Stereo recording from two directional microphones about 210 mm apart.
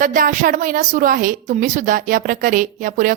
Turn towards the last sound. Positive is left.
turn(degrees=-40)  # may be behind; listen again after turning